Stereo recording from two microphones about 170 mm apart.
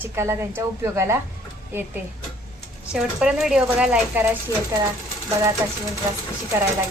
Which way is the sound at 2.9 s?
5° right (ahead or behind).